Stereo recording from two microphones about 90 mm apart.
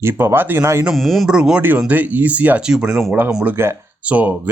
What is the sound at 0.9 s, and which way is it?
Speech, centre (ahead or behind).